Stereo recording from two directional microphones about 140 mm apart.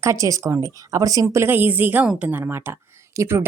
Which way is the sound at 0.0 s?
25° right (ahead or behind).